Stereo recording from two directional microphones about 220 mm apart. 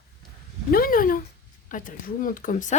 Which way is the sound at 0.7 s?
40° left (ahead or behind).